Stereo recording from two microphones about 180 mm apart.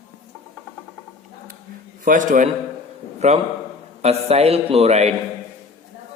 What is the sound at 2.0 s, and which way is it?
A man's voice, 45° right (ahead or behind).